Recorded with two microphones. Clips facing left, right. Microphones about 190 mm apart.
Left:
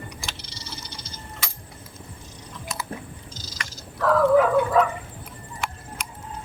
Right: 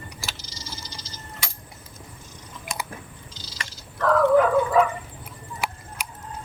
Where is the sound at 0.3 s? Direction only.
65° left (ahead or behind).